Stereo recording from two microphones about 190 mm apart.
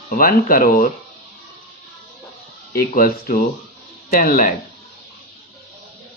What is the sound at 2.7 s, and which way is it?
Speech, 50° left (ahead or behind).